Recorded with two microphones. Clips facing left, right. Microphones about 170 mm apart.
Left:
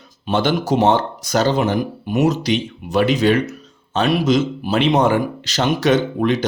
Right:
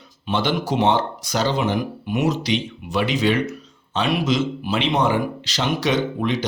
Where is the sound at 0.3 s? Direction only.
45° left (ahead or behind).